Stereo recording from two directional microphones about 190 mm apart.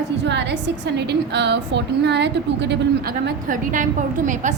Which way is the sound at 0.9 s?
65° right (ahead or behind).